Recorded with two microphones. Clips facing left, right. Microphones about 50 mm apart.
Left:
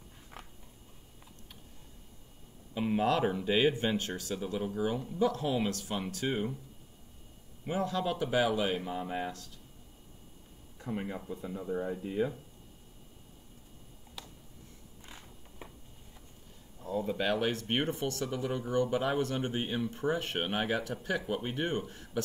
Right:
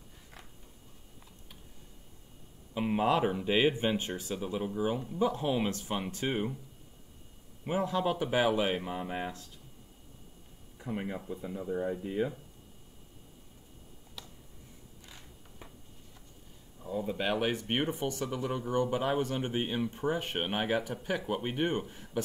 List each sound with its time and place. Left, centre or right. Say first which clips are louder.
2.7 s speech: right 1 dB; centre
7.6 s speech: right 2 dB; centre
10.8 s speech: right 1 dB; centre
15.0 s a sound: left 3 dB; left
16.8 s speech: left 1 dB; centre